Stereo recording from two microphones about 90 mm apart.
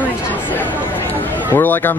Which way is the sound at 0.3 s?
20° left (ahead or behind).